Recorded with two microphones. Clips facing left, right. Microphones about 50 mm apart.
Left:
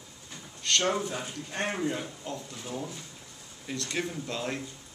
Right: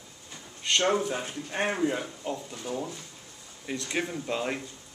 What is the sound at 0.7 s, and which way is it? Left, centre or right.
Speech, centre.